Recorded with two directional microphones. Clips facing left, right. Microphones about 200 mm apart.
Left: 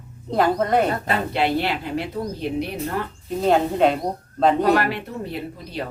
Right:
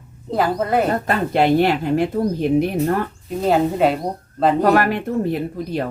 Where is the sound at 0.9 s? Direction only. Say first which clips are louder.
Right 4 dB; 45° right (ahead or behind).